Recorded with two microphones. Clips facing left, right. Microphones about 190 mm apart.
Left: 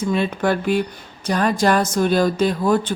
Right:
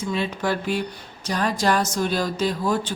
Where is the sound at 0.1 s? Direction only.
55° left (ahead or behind).